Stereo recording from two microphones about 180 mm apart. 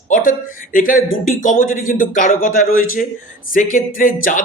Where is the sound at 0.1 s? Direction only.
50° left (ahead or behind).